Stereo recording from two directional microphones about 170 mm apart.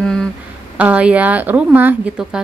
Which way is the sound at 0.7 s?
10° right (ahead or behind).